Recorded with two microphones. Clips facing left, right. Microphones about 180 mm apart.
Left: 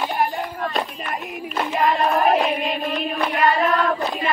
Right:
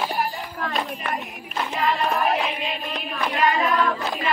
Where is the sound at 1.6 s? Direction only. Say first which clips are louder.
Left 4 dB; 40° left (ahead or behind).